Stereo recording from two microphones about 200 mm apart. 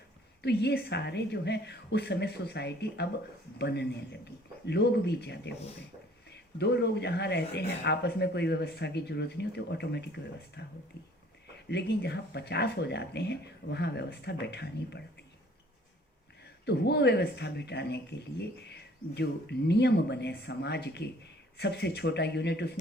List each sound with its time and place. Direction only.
0.4 s speech: 55° left (ahead or behind)
11.7 s speech: 55° left (ahead or behind)
16.6 s speech: 55° left (ahead or behind)